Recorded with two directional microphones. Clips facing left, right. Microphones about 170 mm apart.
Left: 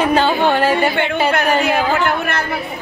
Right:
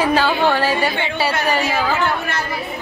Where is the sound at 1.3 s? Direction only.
60° left (ahead or behind).